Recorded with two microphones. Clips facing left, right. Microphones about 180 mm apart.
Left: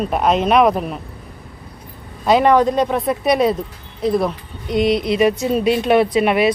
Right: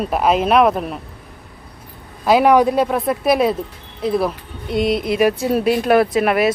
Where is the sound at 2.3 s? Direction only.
5° right (ahead or behind).